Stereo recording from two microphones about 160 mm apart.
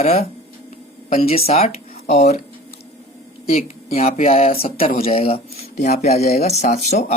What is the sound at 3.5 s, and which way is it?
Speech, 40° left (ahead or behind).